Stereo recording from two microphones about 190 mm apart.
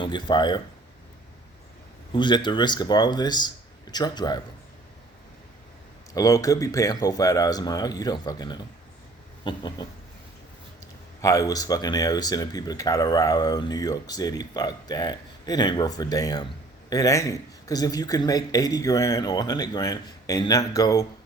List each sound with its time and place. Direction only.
0.0 s speech: 25° left (ahead or behind)
2.1 s speech: 25° left (ahead or behind)
6.1 s speech: 15° left (ahead or behind)
11.2 s speech: 15° left (ahead or behind)